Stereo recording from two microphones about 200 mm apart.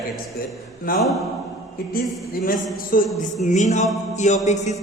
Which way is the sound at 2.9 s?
45° left (ahead or behind).